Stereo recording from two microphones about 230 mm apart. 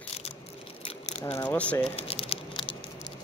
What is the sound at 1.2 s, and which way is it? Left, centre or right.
Speech, centre.